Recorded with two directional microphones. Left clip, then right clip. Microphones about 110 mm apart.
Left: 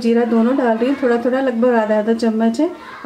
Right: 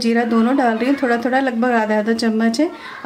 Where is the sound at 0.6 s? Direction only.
55° right (ahead or behind).